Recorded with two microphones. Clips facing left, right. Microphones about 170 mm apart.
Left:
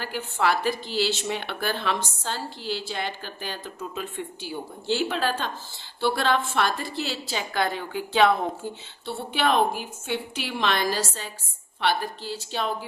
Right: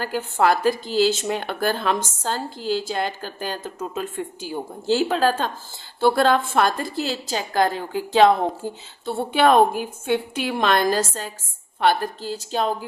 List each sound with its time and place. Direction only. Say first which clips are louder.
0.0 s speech: right 5 dB; 45° right (ahead or behind)